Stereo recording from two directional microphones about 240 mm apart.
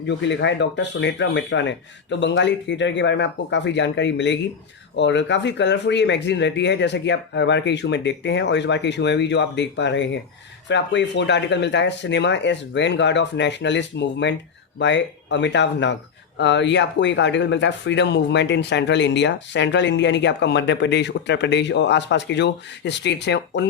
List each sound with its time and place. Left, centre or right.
0.1 s speech: left